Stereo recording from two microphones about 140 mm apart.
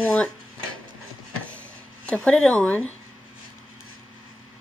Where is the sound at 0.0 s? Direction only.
10° left (ahead or behind).